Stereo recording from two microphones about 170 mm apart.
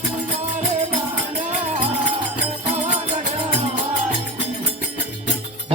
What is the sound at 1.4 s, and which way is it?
Music, 40° right (ahead or behind).